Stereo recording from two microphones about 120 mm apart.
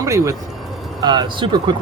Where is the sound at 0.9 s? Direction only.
40° right (ahead or behind).